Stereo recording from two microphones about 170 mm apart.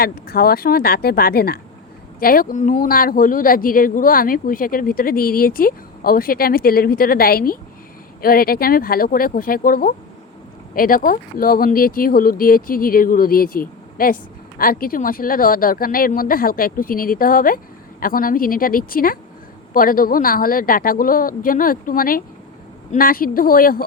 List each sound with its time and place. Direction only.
0.0 s a man's voice: 65° left (ahead or behind)